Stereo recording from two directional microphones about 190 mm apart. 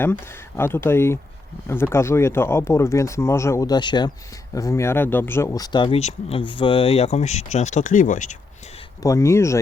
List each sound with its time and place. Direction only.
0.0 s speech: 10° left (ahead or behind)
6.0 s speech: 35° left (ahead or behind)
9.0 s speech: 15° left (ahead or behind)